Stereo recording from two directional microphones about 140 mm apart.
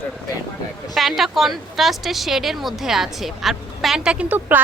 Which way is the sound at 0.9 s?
Centre (ahead or behind).